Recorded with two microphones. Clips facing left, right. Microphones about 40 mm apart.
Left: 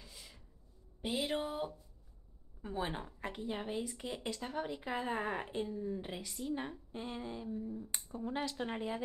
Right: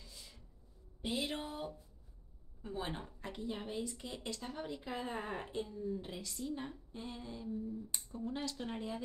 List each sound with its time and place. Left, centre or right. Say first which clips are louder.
0.0 s a sound: left 1 dB; left
1.0 s music: left 3 dB; centre
2.6 s a woman's voice: left 3 dB; centre